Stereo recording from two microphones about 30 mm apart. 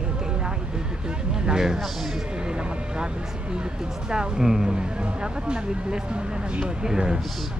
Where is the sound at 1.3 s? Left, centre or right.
Right.